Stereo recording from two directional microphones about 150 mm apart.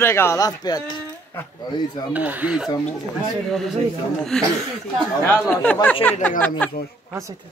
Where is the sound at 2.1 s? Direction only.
10° right (ahead or behind).